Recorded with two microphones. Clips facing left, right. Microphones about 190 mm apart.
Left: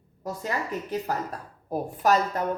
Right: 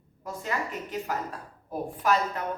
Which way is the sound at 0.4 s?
40° left (ahead or behind).